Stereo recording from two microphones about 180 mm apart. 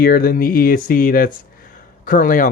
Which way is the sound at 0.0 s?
55° left (ahead or behind).